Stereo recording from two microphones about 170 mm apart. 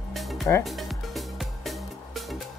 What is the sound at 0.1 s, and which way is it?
Music, centre (ahead or behind).